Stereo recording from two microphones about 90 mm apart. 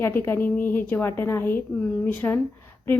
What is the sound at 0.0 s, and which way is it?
A woman's voice, 25° left (ahead or behind).